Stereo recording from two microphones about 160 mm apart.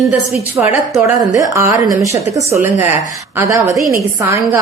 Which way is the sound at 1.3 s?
20° right (ahead or behind).